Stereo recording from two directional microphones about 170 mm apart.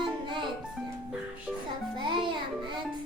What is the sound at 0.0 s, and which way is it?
Music, 30° right (ahead or behind).